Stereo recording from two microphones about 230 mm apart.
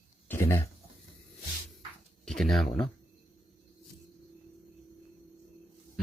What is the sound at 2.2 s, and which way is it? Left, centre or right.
Speech, centre.